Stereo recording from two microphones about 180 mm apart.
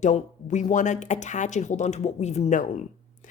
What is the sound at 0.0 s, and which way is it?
A woman's voice, 40° left (ahead or behind).